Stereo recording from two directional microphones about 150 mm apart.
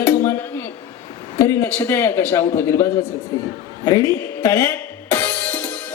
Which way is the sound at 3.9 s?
20° left (ahead or behind).